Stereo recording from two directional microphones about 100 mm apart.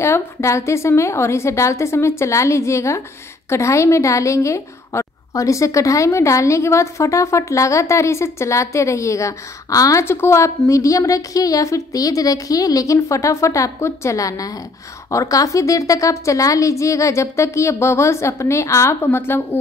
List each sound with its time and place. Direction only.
0.0 s a woman's voice: 30° left (ahead or behind)